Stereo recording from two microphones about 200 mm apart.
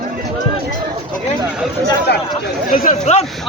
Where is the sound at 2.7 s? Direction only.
40° left (ahead or behind).